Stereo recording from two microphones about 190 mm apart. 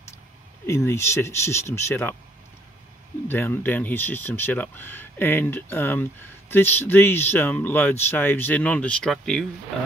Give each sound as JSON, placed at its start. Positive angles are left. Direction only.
{"t": 0.7, "sound": "speech", "side_deg": 15}
{"t": 3.3, "sound": "speech", "side_deg": 10}